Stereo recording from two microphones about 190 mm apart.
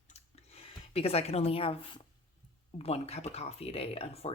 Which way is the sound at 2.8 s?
35° left (ahead or behind).